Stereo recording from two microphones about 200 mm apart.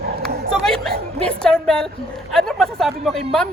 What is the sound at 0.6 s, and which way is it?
Speech, 5° left (ahead or behind).